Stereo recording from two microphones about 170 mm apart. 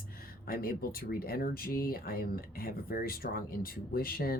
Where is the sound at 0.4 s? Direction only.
60° left (ahead or behind).